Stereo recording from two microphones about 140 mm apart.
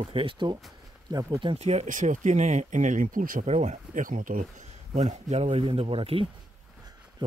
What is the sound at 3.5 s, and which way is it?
Speech, 55° right (ahead or behind).